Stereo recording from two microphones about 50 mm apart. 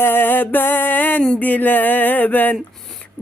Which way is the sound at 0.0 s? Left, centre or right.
Left.